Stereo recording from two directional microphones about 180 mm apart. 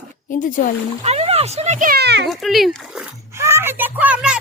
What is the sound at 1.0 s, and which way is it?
Speech, 35° right (ahead or behind).